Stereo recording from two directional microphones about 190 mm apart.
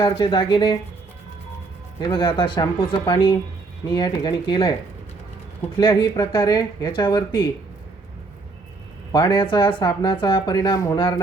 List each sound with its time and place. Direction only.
0.0 s speech: 25° left (ahead or behind)
2.0 s speech: 25° left (ahead or behind)
5.7 s speech: 25° left (ahead or behind)
9.1 s speech: 25° left (ahead or behind)